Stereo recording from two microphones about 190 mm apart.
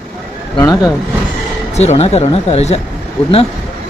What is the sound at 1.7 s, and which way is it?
Speech, 35° left (ahead or behind).